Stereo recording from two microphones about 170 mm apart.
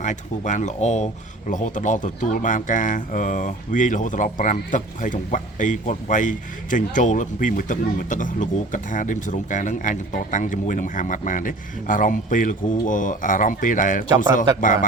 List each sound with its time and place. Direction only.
0.0 s speech: 45° left (ahead or behind)